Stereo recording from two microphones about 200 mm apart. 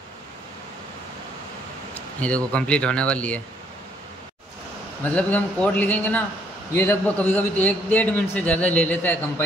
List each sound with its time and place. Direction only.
2.0 s speech: 5° left (ahead or behind)
5.0 s a man's voice: 5° left (ahead or behind)